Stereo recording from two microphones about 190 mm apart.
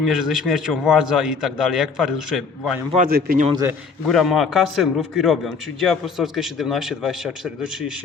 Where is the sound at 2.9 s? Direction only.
50° right (ahead or behind).